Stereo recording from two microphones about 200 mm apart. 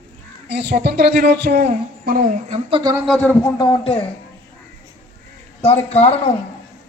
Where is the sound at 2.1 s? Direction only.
45° right (ahead or behind); by 2.9 s 25° right (ahead or behind).